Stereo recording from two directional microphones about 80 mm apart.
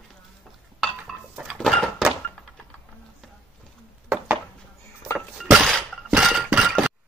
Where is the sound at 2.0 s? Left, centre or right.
Centre.